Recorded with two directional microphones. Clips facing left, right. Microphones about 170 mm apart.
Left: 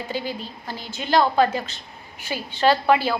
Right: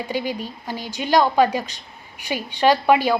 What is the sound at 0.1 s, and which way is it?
A woman's voice, 15° right (ahead or behind).